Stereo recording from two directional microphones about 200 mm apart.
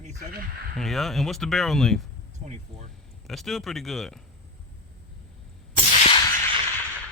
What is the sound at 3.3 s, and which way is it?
Speech, centre (ahead or behind).